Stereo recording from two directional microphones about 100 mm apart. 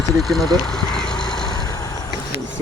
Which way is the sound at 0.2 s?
Centre (ahead or behind).